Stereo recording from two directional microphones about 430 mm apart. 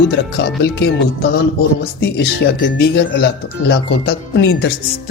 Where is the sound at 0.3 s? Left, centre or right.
Left.